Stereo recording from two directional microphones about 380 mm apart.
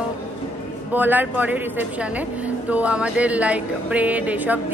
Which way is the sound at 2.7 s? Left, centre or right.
Centre.